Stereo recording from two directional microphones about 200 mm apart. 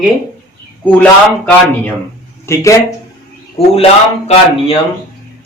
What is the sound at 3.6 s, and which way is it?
Speech, 30° left (ahead or behind).